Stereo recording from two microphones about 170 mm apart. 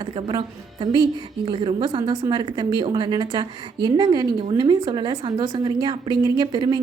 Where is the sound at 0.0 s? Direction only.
30° right (ahead or behind).